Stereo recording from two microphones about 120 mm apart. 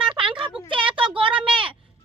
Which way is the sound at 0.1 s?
45° right (ahead or behind).